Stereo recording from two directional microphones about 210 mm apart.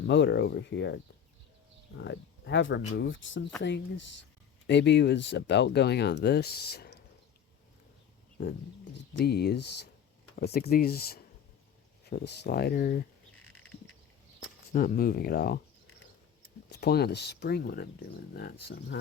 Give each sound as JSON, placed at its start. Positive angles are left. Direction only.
{"t": 0.1, "sound": "speech", "side_deg": 55}
{"t": 8.4, "sound": "speech", "side_deg": 50}
{"t": 14.4, "sound": "speech", "side_deg": 45}
{"t": 16.6, "sound": "speech", "side_deg": 50}